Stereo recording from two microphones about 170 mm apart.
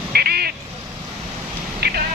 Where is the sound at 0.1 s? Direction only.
65° right (ahead or behind).